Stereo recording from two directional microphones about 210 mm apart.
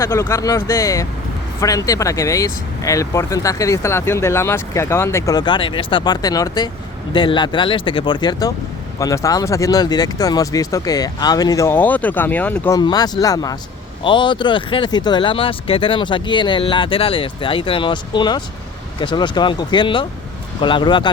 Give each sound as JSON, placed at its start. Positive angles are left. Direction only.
{"t": 0.0, "sound": "speech", "side_deg": 15}